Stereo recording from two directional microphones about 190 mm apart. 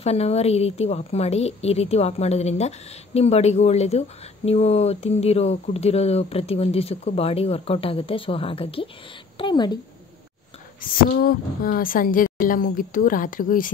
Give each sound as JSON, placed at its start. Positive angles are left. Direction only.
{"t": 0.0, "sound": "a woman's voice", "side_deg": 35}
{"t": 10.8, "sound": "a woman's voice", "side_deg": 50}